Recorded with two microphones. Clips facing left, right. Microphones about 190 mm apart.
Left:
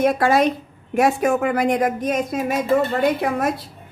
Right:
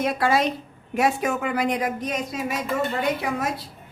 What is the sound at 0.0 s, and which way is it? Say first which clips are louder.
Speech: left 5 dB; 50° left (ahead or behind).